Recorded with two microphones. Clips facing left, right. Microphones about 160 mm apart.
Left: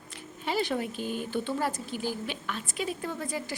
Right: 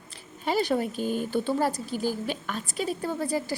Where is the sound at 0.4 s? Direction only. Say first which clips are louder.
Right 4 dB; 40° right (ahead or behind).